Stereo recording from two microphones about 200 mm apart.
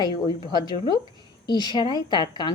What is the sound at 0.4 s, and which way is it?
A woman's voice, 20° left (ahead or behind).